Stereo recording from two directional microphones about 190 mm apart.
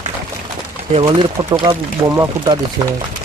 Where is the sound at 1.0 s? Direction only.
25° right (ahead or behind).